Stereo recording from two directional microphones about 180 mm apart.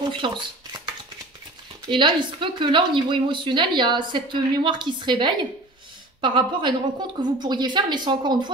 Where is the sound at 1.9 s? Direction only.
25° right (ahead or behind).